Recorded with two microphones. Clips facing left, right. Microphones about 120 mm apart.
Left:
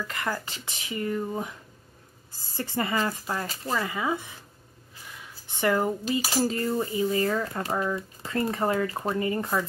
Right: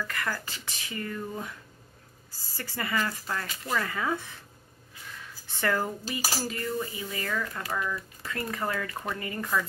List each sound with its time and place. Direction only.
0.0 s speech: 20° left (ahead or behind)
3.8 s speech: 15° left (ahead or behind)
5.0 s a sound: 15° left (ahead or behind)
6.4 s speech: 30° left (ahead or behind)